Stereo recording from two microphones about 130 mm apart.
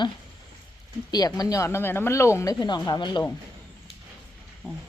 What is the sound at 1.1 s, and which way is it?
Speech, 30° left (ahead or behind).